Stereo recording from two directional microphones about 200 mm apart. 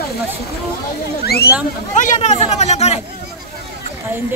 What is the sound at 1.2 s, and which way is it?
Speech, 50° left (ahead or behind).